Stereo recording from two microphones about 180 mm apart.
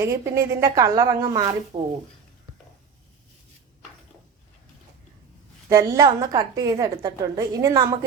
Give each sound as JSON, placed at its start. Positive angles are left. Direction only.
{"t": 0.0, "sound": "a woman's voice", "side_deg": -15}
{"t": 1.7, "sound": "speech", "side_deg": -35}
{"t": 5.6, "sound": "a woman's voice", "side_deg": -20}